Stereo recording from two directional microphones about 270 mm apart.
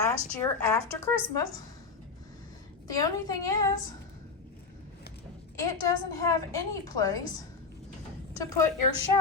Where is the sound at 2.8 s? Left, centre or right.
Centre.